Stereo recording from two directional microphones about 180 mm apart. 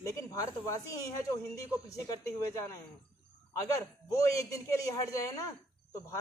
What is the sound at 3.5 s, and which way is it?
A man's voice, 15° left (ahead or behind).